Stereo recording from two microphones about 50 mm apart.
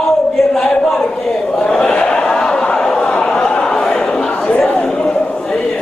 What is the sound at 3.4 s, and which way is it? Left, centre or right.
Chatter, centre.